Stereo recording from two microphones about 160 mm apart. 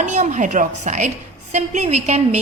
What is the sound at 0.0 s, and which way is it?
A woman's voice, 45° right (ahead or behind).